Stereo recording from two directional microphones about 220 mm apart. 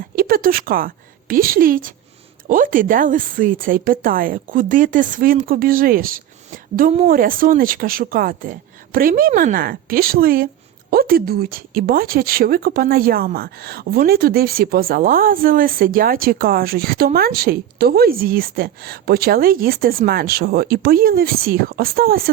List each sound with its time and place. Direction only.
0.2 s a woman's voice: 40° right (ahead or behind)